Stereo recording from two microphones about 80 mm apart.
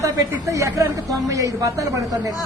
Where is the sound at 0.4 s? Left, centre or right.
Right.